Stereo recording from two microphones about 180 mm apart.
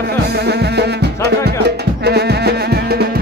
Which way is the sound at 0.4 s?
65° right (ahead or behind).